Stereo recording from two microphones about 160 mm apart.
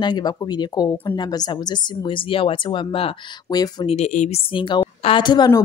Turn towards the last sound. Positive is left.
turn(degrees=25)  # may be behind; listen again after turning